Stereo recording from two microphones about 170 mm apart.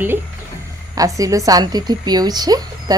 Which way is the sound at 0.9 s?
20° right (ahead or behind).